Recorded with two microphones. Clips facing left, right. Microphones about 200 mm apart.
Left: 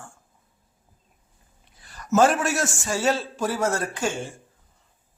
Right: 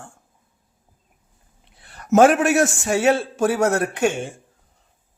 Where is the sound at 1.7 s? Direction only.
60° right (ahead or behind).